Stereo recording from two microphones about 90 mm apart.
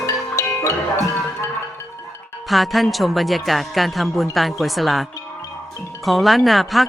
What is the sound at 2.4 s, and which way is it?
Speech, centre (ahead or behind).